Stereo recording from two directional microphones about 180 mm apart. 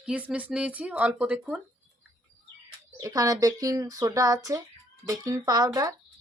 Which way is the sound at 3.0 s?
20° right (ahead or behind).